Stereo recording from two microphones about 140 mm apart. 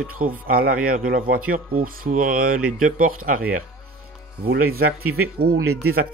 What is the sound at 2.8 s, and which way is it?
Speech, 80° right.